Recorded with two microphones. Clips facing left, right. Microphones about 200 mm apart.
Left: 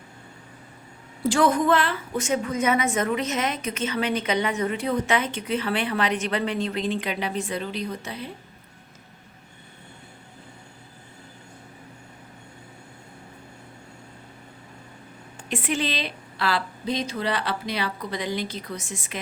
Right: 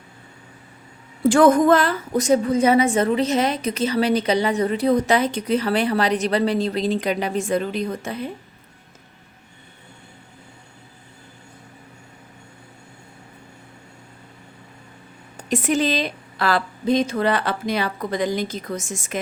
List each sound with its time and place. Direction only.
1.2 s a woman's voice: 50° right (ahead or behind)
15.4 s a woman's voice: 40° right (ahead or behind)